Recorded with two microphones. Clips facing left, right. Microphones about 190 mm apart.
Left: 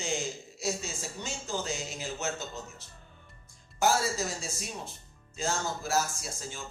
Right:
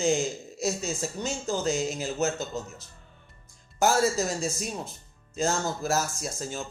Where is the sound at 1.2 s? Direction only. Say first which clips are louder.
Right 7 dB; 40° right (ahead or behind).